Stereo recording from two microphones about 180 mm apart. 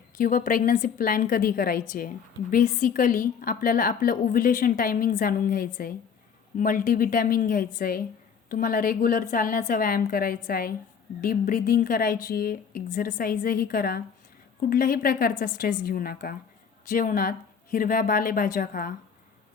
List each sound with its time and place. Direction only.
0.2 s a woman's voice: 50° left (ahead or behind)